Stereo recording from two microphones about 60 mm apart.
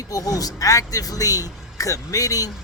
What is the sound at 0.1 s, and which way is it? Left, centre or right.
A man's voice, left.